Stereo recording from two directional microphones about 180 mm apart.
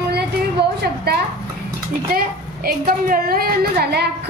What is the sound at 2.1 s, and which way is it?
A woman's voice, 55° right (ahead or behind).